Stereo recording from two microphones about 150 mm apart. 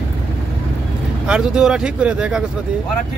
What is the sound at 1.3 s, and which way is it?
A man's voice, 5° right (ahead or behind).